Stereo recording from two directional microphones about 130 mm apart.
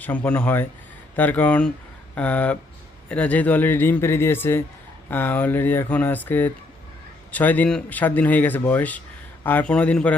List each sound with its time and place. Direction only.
0.0 s speech: 15° left (ahead or behind)